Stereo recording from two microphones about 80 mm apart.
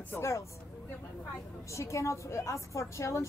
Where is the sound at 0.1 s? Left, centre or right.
Left.